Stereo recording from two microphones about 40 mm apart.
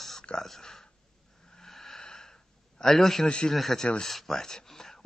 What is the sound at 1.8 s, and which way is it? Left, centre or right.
Wheeze, centre.